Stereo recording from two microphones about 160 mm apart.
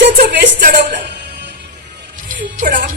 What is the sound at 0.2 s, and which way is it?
Music, 60° right (ahead or behind).